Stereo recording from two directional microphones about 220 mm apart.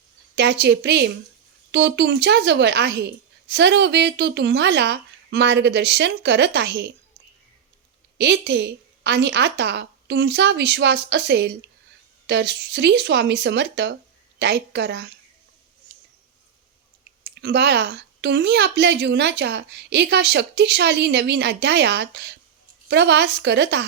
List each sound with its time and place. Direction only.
0.3 s speech: 50° right (ahead or behind)
8.2 s speech: 50° right (ahead or behind)
17.2 s speech: 50° right (ahead or behind)